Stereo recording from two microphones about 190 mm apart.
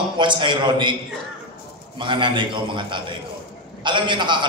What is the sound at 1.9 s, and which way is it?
A man's voice, 25° right (ahead or behind).